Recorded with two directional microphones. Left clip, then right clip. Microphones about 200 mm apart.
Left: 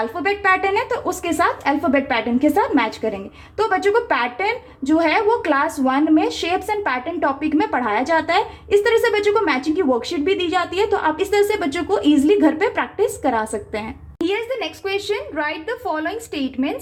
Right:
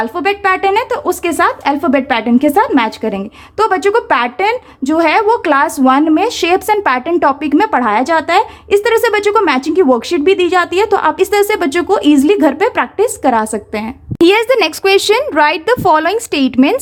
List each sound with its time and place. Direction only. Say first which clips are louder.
0.0 s a woman's voice: right 6 dB; 35° right (ahead or behind)
14.3 s speech: right 13 dB; 45° right (ahead or behind)